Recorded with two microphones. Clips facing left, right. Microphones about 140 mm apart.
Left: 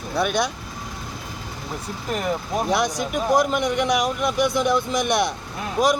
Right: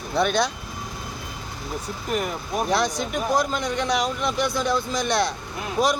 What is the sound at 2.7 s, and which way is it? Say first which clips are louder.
Speech: even; 15° left (ahead or behind).